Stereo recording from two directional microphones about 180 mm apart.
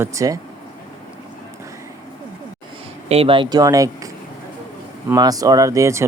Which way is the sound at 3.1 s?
30° right (ahead or behind).